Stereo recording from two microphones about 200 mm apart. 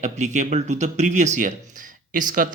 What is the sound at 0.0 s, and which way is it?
Speech, 35° right (ahead or behind).